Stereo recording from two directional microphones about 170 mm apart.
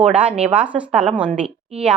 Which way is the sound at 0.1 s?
5° right (ahead or behind).